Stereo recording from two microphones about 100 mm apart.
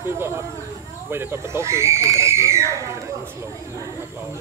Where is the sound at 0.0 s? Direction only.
25° right (ahead or behind).